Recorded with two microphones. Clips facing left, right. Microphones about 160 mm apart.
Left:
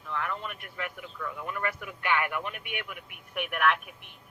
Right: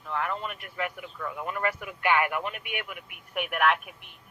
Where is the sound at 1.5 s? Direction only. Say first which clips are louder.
Right 3 dB; 50° right (ahead or behind).